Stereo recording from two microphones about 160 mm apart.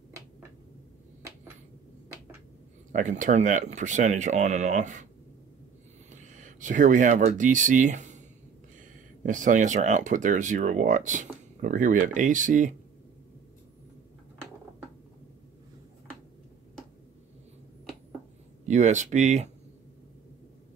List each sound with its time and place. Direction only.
2.9 s speech: 50° right (ahead or behind)
6.1 s speech: 50° right (ahead or behind)
9.2 s speech: 55° right (ahead or behind)
18.7 s speech: 50° right (ahead or behind)